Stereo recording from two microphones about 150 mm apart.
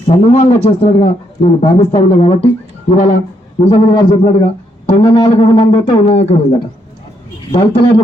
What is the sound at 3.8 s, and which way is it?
Speech, 35° left (ahead or behind).